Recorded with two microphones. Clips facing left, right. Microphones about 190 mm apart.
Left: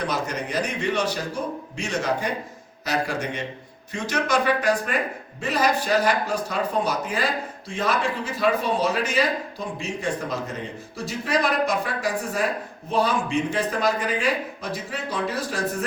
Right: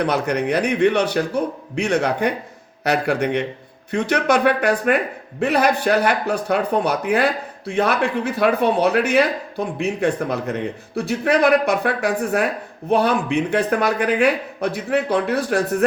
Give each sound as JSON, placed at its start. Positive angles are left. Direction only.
{"t": 0.0, "sound": "speech", "side_deg": -60}